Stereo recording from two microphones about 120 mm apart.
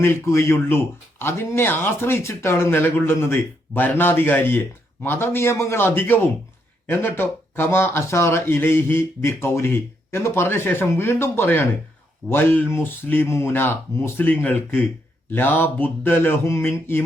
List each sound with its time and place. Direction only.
0.0 s speech: 20° left (ahead or behind)